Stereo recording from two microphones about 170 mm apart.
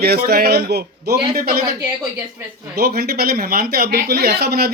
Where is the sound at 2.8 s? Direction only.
65° right (ahead or behind).